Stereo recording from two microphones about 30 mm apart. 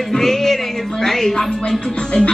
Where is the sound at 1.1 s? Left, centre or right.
Centre.